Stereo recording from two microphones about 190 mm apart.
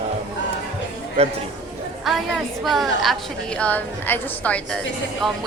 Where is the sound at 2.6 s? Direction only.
Centre (ahead or behind).